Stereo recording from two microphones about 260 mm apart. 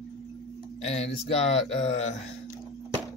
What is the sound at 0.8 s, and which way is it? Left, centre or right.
Speech, left.